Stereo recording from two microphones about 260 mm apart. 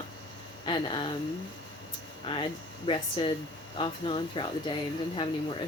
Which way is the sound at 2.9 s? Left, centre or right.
Centre.